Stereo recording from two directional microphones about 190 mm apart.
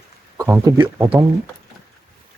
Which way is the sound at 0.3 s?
15° right (ahead or behind).